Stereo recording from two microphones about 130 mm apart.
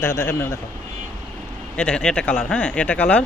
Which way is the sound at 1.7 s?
10° left (ahead or behind).